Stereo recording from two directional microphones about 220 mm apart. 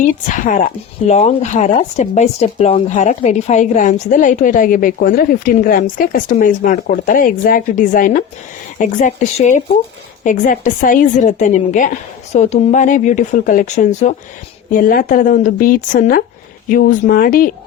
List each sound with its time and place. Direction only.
0.3 s speech: 35° left (ahead or behind)